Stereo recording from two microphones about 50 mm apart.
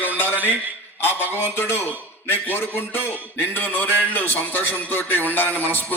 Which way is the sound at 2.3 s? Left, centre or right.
Left.